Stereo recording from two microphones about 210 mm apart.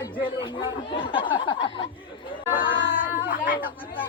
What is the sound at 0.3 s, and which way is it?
A woman's voice, 25° left (ahead or behind).